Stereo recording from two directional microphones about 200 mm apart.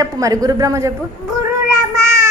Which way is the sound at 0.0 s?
15° right (ahead or behind).